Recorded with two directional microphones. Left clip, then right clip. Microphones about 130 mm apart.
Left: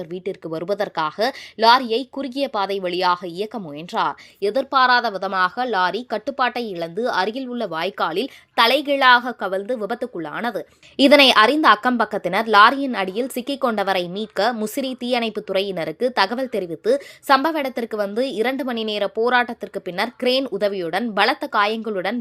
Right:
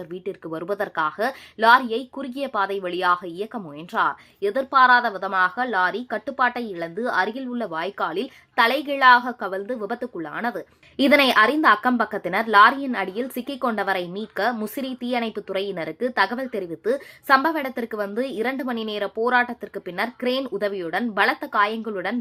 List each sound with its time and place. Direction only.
0.1 s a woman's voice: 40° left (ahead or behind)
20.4 s a woman's voice: 35° left (ahead or behind)